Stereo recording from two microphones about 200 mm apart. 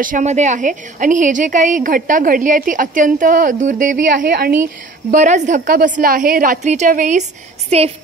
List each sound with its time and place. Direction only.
0.0 s a woman's voice: 40° right (ahead or behind)
5.1 s a woman's voice: 35° right (ahead or behind)